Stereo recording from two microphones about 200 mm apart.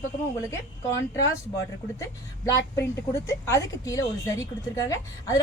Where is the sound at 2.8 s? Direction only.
15° left (ahead or behind).